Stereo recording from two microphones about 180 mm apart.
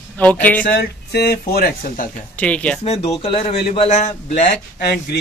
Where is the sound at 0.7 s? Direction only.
65° left (ahead or behind).